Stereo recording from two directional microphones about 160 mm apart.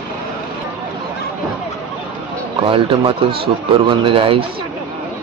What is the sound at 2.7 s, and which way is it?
Speech, 35° right (ahead or behind).